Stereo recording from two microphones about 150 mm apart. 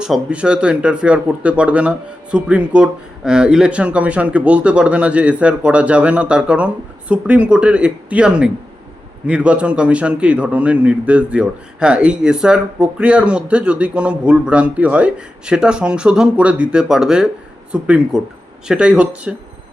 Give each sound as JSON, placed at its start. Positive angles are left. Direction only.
{"t": 0.0, "sound": "a man's voice", "side_deg": -5}